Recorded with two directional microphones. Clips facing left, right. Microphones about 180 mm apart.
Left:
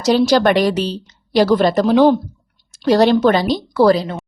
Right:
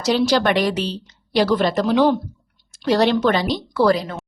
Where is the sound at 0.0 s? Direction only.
40° left (ahead or behind).